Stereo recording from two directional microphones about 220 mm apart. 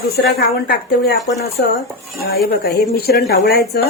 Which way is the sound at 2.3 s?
45° left (ahead or behind).